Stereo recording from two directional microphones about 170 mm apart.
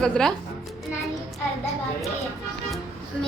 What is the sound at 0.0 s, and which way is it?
Speech, 5° left (ahead or behind).